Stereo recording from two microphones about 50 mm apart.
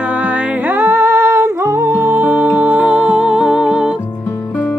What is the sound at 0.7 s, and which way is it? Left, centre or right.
Music, right.